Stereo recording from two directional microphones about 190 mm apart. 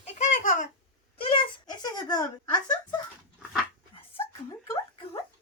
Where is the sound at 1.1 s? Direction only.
30° left (ahead or behind).